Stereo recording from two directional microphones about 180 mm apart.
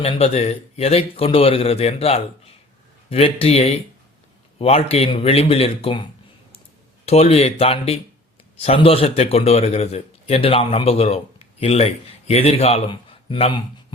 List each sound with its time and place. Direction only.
0.0 s a man's voice: 35° left (ahead or behind)
7.0 s a man's voice: 35° left (ahead or behind)